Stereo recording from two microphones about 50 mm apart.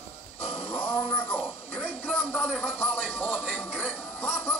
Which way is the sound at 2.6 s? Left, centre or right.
Left.